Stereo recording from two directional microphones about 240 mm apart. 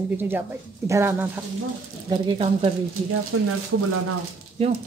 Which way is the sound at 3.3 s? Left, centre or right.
Right.